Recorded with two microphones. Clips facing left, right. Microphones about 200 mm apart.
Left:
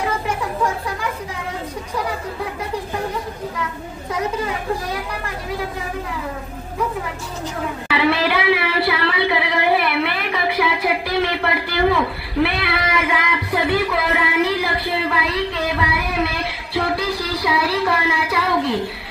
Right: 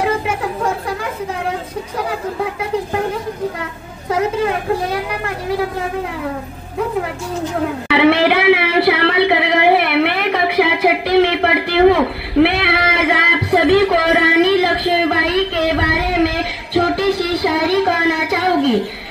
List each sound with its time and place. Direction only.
0.0 s chatter: 60° right (ahead or behind)
4.1 s a woman's voice: 60° right (ahead or behind)
7.9 s a sound: 65° right (ahead or behind)
16.7 s music: 70° right (ahead or behind)